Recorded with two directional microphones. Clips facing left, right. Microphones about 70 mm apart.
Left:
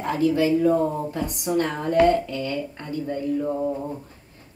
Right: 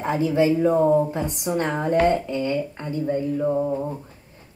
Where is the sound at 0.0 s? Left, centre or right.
Right.